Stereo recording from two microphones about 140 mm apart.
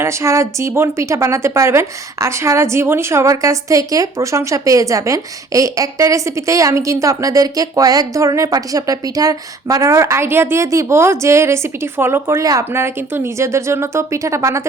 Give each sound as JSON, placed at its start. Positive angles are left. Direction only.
{"t": 0.0, "sound": "a woman's voice", "side_deg": -20}